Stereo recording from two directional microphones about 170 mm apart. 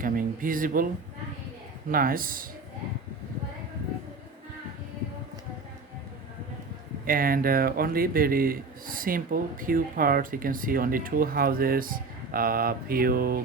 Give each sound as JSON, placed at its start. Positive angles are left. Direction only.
{"t": 0.0, "sound": "speech", "side_deg": -55}
{"t": 1.9, "sound": "speech", "side_deg": -55}
{"t": 7.0, "sound": "speech", "side_deg": -55}